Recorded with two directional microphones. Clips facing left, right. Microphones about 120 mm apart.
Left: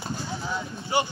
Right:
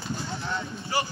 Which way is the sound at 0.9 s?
25° left (ahead or behind).